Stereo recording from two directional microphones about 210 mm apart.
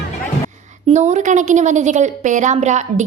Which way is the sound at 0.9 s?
35° right (ahead or behind).